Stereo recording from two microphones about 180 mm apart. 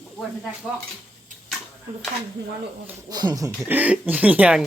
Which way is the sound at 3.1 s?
20° right (ahead or behind).